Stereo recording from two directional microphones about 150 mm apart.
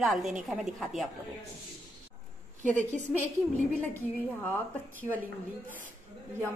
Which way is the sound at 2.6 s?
55° right (ahead or behind).